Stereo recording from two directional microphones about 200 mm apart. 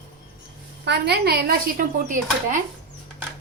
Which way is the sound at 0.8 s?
55° right (ahead or behind).